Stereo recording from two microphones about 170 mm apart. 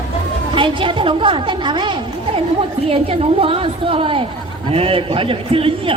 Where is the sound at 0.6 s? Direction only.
30° right (ahead or behind).